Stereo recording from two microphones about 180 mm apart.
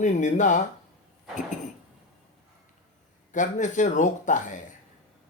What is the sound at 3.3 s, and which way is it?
Speech, 45° left (ahead or behind).